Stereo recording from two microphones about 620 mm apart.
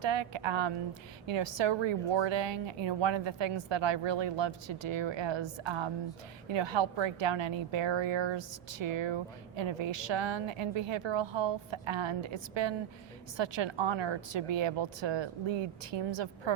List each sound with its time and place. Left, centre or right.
0.0 s a woman's voice: right